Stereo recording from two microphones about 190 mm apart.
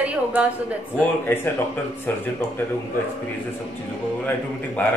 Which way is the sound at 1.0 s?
10° left (ahead or behind).